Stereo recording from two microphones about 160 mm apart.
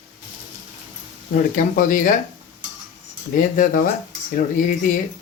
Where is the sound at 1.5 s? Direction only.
55° left (ahead or behind).